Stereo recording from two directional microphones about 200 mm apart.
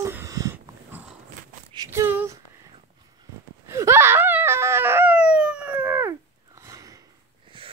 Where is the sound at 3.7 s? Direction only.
15° right (ahead or behind).